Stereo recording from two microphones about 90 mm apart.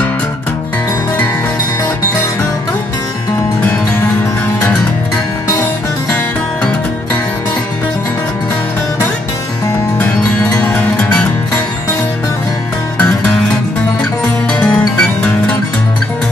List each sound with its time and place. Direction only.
10.6 s music: 15° left (ahead or behind)
12.9 s music: 15° left (ahead or behind)
14.5 s music: 10° left (ahead or behind)